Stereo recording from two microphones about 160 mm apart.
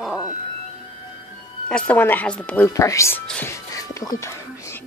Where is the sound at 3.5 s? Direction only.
20° left (ahead or behind).